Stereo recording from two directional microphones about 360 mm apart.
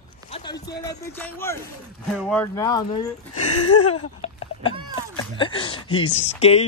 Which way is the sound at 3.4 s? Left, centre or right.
Left.